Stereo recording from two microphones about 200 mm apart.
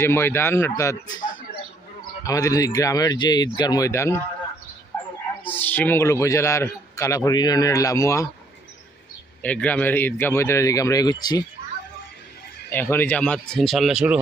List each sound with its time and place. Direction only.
0.0 s a man's voice: 10° left (ahead or behind)
2.2 s a man's voice: 15° left (ahead or behind)
5.5 s a man's voice: 10° left (ahead or behind)
9.4 s a man's voice: 5° left (ahead or behind)
12.7 s speech: 10° left (ahead or behind)